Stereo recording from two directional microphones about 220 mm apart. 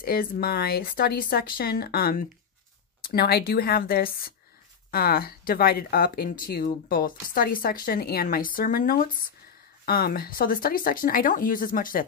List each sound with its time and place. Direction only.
0.0 s speech: 45° left (ahead or behind)